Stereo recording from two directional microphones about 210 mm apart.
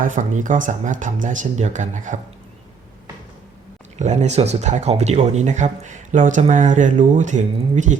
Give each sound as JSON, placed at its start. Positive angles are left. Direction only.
{"t": 0.0, "sound": "speech", "side_deg": -40}
{"t": 3.9, "sound": "speech", "side_deg": -35}